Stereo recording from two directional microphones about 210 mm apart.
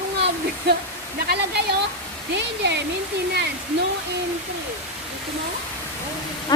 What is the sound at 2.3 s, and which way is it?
Speech, 55° right (ahead or behind).